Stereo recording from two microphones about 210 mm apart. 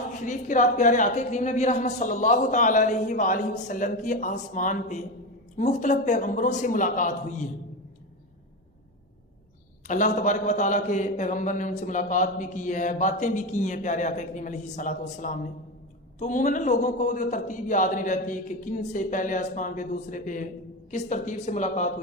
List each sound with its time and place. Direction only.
0.3 s a man's voice: 35° left (ahead or behind)
9.8 s a man's voice: 35° left (ahead or behind)